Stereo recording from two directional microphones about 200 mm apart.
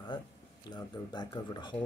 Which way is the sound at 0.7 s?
20° left (ahead or behind).